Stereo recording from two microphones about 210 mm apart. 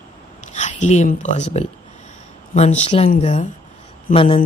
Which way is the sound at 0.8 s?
35° left (ahead or behind).